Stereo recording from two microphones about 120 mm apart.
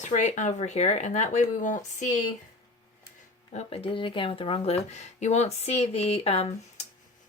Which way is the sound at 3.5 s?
50° left (ahead or behind).